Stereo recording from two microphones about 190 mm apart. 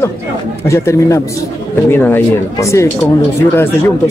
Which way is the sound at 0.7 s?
15° left (ahead or behind).